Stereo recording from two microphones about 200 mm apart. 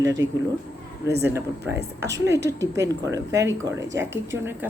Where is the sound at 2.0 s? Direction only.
60° right (ahead or behind).